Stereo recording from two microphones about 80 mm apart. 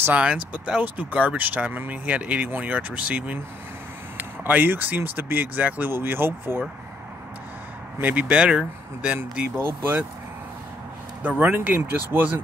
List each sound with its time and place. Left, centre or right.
0.0 s speech: centre
8.0 s speech: centre
11.2 s speech: right